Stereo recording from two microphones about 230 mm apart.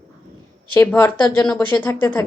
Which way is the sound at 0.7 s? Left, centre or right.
Centre.